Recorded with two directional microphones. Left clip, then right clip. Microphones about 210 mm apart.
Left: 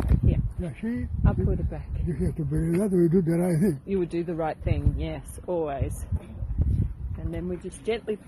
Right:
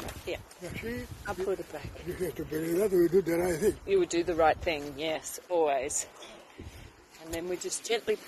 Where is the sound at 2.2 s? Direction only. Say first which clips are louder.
Left 1 dB; centre (ahead or behind).